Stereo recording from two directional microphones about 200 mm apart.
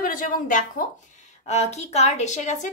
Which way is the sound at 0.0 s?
45° left (ahead or behind).